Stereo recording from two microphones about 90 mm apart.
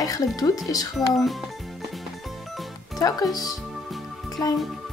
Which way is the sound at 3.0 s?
45° left (ahead or behind).